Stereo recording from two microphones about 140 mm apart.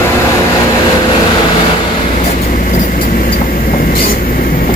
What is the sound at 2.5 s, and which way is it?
Vehicle, 70° left (ahead or behind).